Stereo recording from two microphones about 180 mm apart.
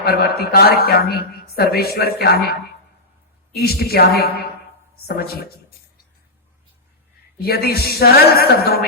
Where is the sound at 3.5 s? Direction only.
60° left (ahead or behind).